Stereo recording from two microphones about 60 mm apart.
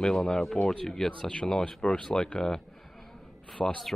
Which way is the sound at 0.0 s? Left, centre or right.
Centre.